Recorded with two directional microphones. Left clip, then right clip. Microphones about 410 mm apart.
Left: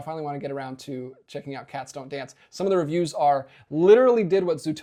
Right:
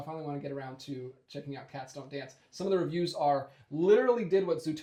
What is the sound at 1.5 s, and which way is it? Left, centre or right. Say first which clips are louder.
Speech: left 9 dB; left.